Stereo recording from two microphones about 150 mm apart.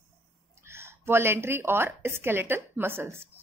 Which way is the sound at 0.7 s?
15° right (ahead or behind).